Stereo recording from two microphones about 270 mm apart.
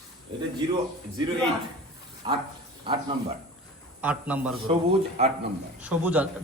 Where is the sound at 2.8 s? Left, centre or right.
Centre.